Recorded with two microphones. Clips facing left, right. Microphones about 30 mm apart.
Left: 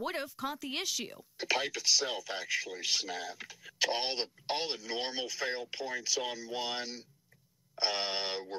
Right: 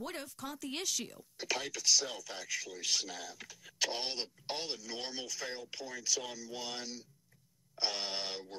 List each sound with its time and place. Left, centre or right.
0.0 s speech: left